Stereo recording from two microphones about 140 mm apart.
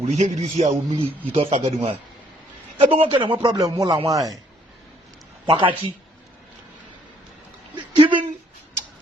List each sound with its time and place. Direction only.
0.0 s a man's voice: 50° right (ahead or behind)
3.4 s speech: 25° right (ahead or behind)
5.5 s a man's voice: 40° right (ahead or behind)
7.9 s a sound: 40° right (ahead or behind)